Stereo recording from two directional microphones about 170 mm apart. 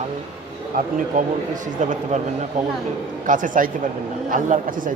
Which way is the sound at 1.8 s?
45° right (ahead or behind).